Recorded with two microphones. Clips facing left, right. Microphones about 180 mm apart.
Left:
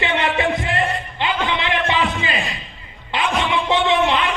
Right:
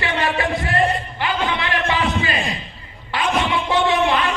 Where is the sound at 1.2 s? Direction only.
20° left (ahead or behind).